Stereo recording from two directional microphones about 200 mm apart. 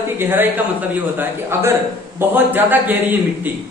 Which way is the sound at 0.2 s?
10° right (ahead or behind).